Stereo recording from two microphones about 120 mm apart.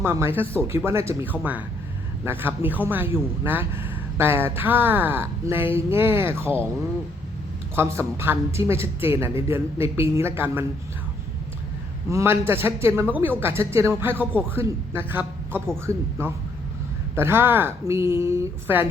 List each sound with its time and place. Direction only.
0.0 s speech: 20° right (ahead or behind)
7.8 s speech: 20° right (ahead or behind)
12.1 s speech: 20° right (ahead or behind)